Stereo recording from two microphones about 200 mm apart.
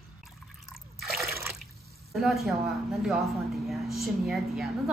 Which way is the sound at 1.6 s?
Centre (ahead or behind).